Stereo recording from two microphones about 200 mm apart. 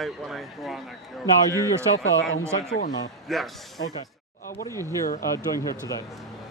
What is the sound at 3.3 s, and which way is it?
Speech, centre (ahead or behind).